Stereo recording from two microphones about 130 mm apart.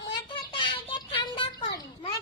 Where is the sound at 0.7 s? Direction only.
40° left (ahead or behind).